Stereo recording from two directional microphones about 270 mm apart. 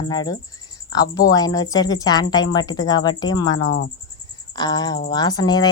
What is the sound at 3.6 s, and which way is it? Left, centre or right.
Cricket, left.